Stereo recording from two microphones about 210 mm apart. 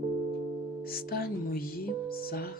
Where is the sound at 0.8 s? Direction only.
45° left (ahead or behind).